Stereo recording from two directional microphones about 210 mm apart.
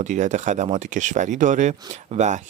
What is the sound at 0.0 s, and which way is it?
Speech, 35° right (ahead or behind).